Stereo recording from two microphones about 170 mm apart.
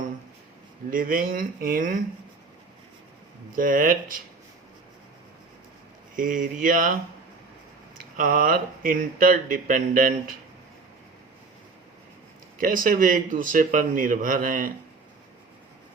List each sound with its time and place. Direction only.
0.9 s speech: 55° right (ahead or behind)
3.5 s speech: 55° right (ahead or behind)
6.1 s speech: 50° right (ahead or behind)
7.9 s speech: 55° right (ahead or behind)
12.5 s speech: 55° right (ahead or behind)